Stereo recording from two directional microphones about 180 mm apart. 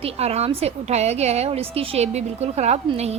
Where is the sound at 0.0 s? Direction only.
35° right (ahead or behind).